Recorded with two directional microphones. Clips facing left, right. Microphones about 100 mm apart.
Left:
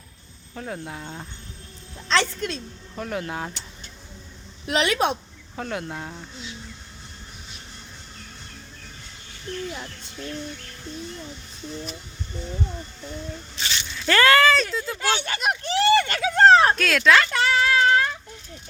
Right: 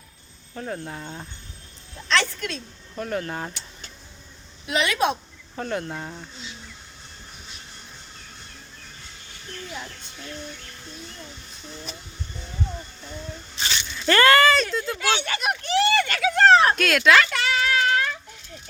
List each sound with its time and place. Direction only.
0.5 s speech: centre (ahead or behind)
2.1 s a woman's voice: 25° left (ahead or behind)
3.0 s speech: 5° left (ahead or behind)
4.7 s a woman's voice: 25° left (ahead or behind)
5.5 s speech: centre (ahead or behind)
13.9 s speech: centre (ahead or behind)
15.2 s a sound: 30° left (ahead or behind)
16.7 s speech: centre (ahead or behind)
17.2 s a sound: 35° left (ahead or behind)